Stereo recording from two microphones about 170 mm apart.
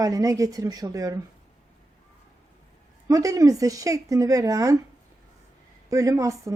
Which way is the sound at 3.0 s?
20° right (ahead or behind).